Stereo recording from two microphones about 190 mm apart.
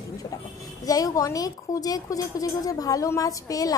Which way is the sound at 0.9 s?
20° left (ahead or behind).